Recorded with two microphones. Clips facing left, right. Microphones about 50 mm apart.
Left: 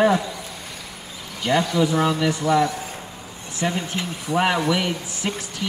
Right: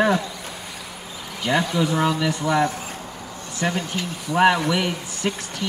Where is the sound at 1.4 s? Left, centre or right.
Centre.